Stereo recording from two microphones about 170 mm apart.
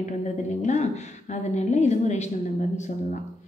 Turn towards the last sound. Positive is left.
turn(degrees=45)  # may be behind; listen again after turning